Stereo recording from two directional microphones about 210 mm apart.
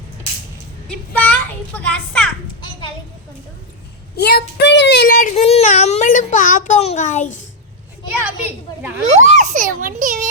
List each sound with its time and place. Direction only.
0.9 s a child's voice: 5° left (ahead or behind)
4.2 s a child's voice: 50° left (ahead or behind)
8.2 s a child's voice: 10° right (ahead or behind)
9.1 s a child's voice: 35° right (ahead or behind)